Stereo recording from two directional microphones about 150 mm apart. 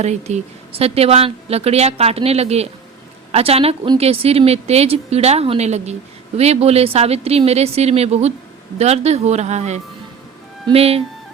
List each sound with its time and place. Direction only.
0.0 s a woman's voice: 50° right (ahead or behind)